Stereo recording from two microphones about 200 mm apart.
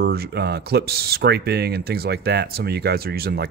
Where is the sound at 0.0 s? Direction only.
50° right (ahead or behind).